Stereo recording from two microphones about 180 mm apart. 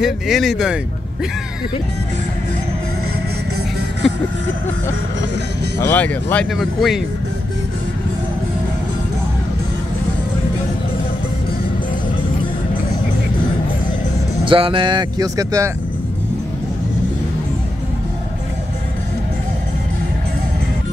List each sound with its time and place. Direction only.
0.0 s speech: centre (ahead or behind)
5.8 s speech: 10° left (ahead or behind)
14.5 s speech: 30° right (ahead or behind)